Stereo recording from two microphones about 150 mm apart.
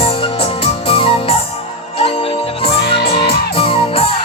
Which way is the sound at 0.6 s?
40° left (ahead or behind).